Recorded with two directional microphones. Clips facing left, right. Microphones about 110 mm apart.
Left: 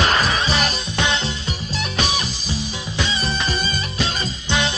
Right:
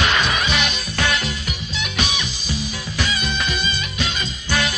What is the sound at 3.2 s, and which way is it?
Music, 35° left (ahead or behind).